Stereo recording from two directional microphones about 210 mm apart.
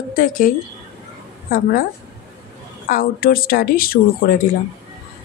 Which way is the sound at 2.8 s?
45° left (ahead or behind).